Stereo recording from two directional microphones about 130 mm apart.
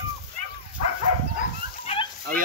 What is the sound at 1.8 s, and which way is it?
Dog, 45° left (ahead or behind).